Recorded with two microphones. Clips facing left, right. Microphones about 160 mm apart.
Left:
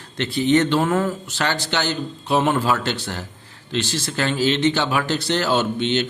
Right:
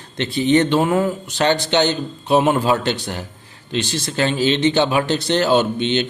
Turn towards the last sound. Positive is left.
turn(degrees=-20)  # may be behind; listen again after turning